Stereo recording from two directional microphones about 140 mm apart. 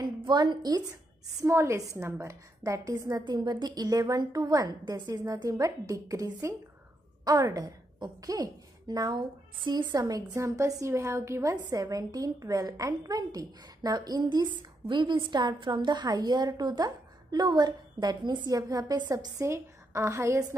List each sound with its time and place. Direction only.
0.0 s a woman's voice: 30° right (ahead or behind)
1.4 s a woman's voice: 20° right (ahead or behind)
7.5 s a woman's voice: 25° right (ahead or behind)